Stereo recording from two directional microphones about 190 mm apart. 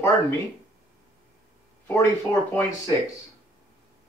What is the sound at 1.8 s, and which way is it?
Speech, 15° left (ahead or behind).